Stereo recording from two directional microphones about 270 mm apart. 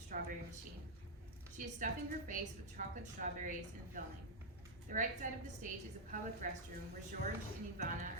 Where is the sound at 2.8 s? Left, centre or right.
Right.